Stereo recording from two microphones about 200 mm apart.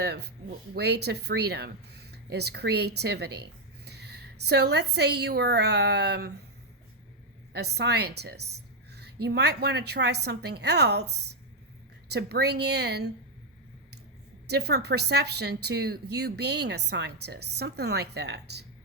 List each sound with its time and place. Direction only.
0.0 s a woman's voice: 55° right (ahead or behind)
7.5 s speech: 55° right (ahead or behind)
14.4 s speech: 55° right (ahead or behind)